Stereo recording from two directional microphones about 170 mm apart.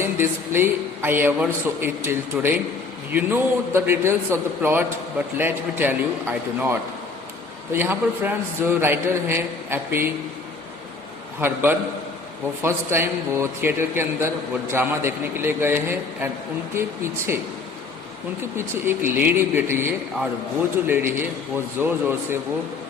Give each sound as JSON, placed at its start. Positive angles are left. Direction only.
{"t": 0.0, "sound": "a man's voice", "side_deg": -15}
{"t": 11.3, "sound": "a man's voice", "side_deg": -10}
{"t": 18.5, "sound": "a man's voice", "side_deg": -15}